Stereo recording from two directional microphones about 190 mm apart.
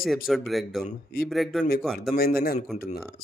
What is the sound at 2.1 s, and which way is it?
Speech, 50° left (ahead or behind).